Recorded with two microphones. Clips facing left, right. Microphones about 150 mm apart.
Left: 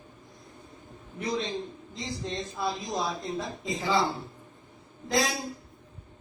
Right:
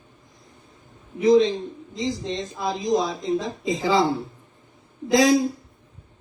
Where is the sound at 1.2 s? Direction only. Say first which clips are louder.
Right 14 dB; 90° right.